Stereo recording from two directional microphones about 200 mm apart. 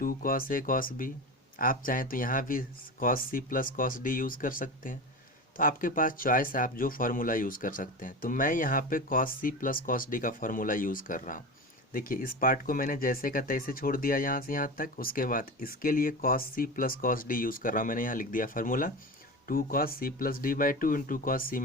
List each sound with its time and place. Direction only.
0.0 s speech: 45° left (ahead or behind)